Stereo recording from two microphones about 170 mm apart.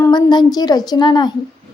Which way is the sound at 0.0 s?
25° left (ahead or behind).